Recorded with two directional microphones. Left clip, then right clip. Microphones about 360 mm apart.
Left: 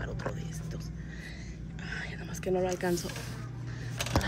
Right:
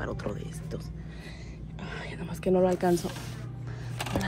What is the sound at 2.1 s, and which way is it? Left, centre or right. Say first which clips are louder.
Whispering: right 5 dB; centre.